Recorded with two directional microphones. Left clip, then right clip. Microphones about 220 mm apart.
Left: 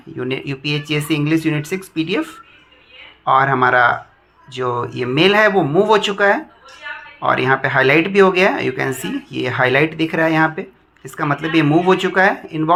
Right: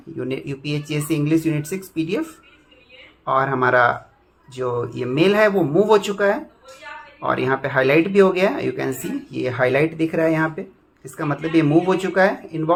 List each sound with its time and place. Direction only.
0.2 s speech: 20° left (ahead or behind)
3.2 s speech: 20° left (ahead or behind)